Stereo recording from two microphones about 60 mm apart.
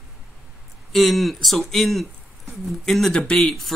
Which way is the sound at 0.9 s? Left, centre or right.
Centre.